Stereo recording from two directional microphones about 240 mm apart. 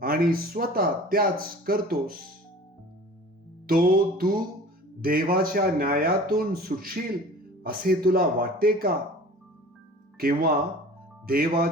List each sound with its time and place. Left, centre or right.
0.0 s speech: right
3.7 s speech: right
10.2 s speech: right